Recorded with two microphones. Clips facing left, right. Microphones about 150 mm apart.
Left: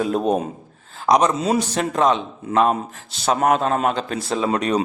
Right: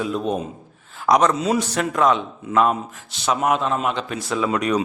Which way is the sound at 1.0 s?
20° left (ahead or behind).